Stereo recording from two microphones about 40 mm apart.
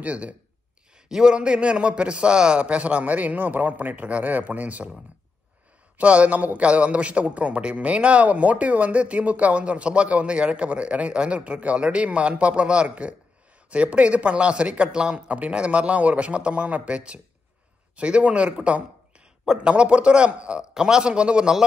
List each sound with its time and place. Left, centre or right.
0.0 s a man's voice: right
1.0 s a man's voice: centre; by 4.9 s right
5.9 s a man's voice: right
19.4 s speech: centre
19.7 s a man's voice: right